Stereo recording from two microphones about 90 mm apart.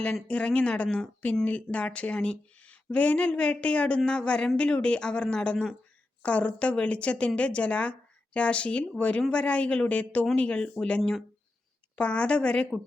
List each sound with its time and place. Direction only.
0.3 s speech: 10° left (ahead or behind)